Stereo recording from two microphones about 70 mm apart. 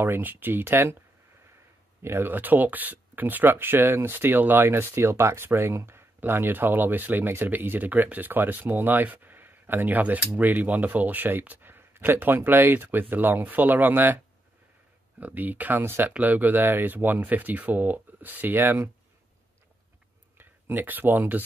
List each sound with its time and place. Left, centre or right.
0.0 s speech: right
2.0 s speech: right
20.3 s speech: right